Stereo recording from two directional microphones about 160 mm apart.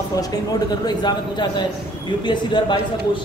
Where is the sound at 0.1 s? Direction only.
25° left (ahead or behind).